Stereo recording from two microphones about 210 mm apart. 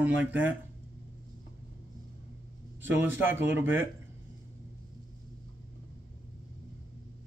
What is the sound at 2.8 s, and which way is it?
Speech, 10° right (ahead or behind).